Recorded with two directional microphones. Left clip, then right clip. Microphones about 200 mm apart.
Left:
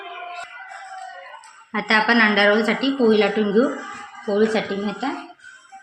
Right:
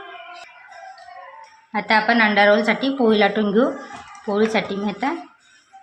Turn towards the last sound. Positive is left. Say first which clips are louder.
# right 1 dB
turn(degrees=-25)  # may be behind; listen again after turning